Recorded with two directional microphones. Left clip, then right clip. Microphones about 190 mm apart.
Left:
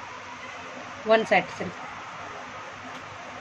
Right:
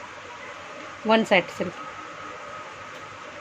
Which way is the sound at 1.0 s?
40° right (ahead or behind).